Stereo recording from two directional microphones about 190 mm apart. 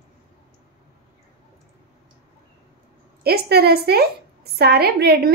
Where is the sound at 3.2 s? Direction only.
55° right (ahead or behind).